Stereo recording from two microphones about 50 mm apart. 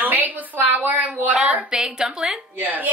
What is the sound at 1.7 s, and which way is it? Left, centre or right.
Speech, centre.